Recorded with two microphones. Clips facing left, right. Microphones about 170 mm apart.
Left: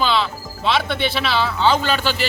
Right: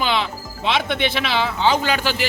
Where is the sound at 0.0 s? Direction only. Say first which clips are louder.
Left 2 dB; 20° right (ahead or behind).